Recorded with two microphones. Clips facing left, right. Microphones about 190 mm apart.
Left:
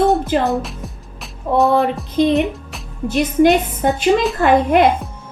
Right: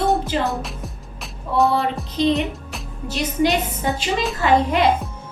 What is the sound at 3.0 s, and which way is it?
A woman's voice, 50° left (ahead or behind).